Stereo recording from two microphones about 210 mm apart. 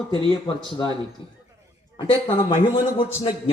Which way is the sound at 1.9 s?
20° left (ahead or behind).